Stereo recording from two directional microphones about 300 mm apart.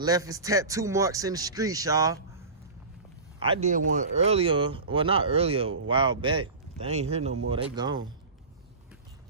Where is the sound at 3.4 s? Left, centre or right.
Centre.